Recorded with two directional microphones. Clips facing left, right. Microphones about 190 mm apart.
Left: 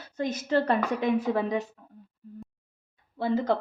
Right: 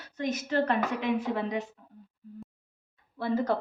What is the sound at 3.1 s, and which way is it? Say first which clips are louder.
Speech: left 2 dB; 20° left (ahead or behind).